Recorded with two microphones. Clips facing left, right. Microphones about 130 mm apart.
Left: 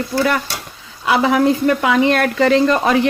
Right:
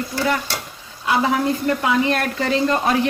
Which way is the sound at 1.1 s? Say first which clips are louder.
Left 5 dB; 90° left.